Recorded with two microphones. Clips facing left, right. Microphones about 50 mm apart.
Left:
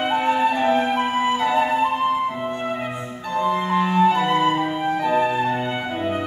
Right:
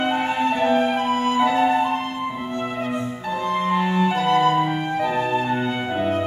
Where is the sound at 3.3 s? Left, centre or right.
Centre.